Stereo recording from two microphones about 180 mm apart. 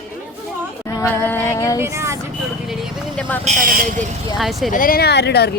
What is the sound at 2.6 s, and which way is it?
Vehicle, centre (ahead or behind).